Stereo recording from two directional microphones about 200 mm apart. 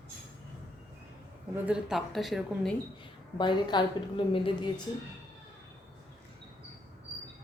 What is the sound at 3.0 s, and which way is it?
A woman's voice, 25° left (ahead or behind).